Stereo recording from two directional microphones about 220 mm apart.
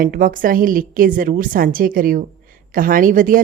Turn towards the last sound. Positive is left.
turn(degrees=-40)  # may be behind; listen again after turning